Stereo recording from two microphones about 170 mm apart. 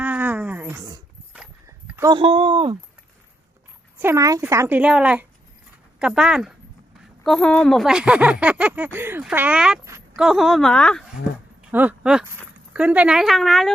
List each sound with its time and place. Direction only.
0.0 s a sound: 10° right (ahead or behind)
2.0 s speech: 20° right (ahead or behind)
2.2 s speech: 35° right (ahead or behind)
4.0 s speech: 20° right (ahead or behind); by 11.0 s 5° left (ahead or behind)
11.7 s speech: 10° right (ahead or behind)